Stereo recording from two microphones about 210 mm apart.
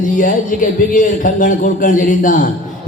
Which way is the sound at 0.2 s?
40° left (ahead or behind).